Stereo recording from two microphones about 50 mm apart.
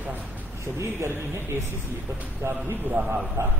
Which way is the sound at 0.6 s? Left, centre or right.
Right.